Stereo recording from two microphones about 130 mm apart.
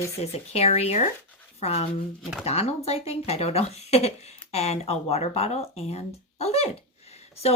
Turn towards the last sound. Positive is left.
turn(degrees=55)  # may be behind; listen again after turning